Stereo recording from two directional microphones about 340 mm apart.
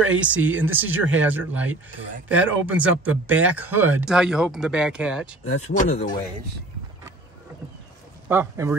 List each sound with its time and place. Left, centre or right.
0.2 s speech: centre
5.7 s speech: centre
8.3 s speech: centre